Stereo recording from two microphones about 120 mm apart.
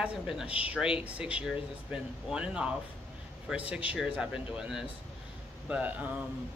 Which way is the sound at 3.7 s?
10° right (ahead or behind).